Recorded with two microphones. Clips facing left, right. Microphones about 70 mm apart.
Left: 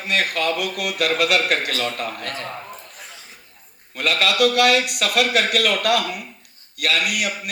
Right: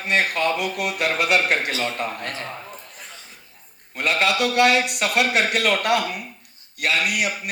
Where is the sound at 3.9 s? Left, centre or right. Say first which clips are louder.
Even; right.